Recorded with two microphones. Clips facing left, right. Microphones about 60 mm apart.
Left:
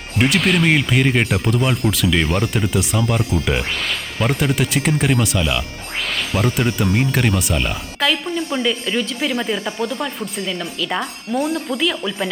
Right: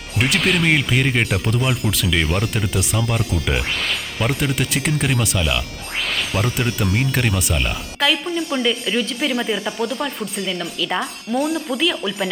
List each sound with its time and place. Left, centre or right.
0.2 s speech: centre
4.2 s speech: centre
6.8 s speech: centre
7.1 s speech: centre
8.4 s speech: left
8.6 s speech: centre
9.7 s speech: left
10.0 s speech: centre
11.4 s speech: centre
11.8 s speech: centre